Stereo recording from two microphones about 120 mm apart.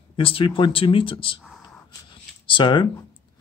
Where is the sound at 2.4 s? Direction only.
40° left (ahead or behind).